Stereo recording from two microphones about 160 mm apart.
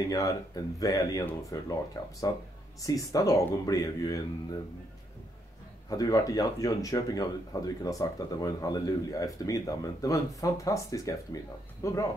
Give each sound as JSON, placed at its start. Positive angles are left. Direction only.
{"t": 0.1, "sound": "speech", "side_deg": 20}
{"t": 5.9, "sound": "speech", "side_deg": 20}